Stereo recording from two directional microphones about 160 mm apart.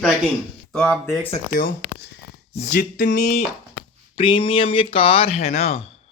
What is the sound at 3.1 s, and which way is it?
Speech, 45° left (ahead or behind).